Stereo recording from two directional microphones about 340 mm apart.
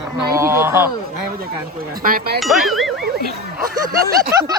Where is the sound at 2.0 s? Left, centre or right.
Right.